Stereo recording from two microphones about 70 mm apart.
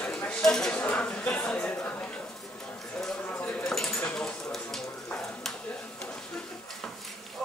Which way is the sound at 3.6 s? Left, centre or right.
Centre.